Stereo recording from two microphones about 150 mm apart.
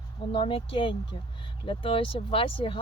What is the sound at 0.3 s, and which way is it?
Speech, 35° left (ahead or behind).